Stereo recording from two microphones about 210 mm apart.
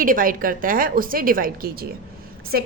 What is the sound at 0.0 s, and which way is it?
A woman's voice, 40° right (ahead or behind).